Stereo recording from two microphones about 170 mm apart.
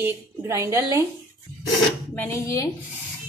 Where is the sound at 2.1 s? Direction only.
15° left (ahead or behind).